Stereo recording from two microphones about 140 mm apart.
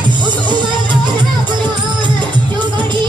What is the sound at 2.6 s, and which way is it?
Music, 35° right (ahead or behind).